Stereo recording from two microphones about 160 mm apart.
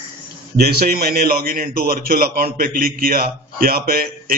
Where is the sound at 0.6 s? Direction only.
75° right (ahead or behind).